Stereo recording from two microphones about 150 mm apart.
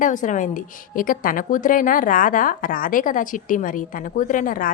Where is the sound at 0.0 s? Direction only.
60° left (ahead or behind).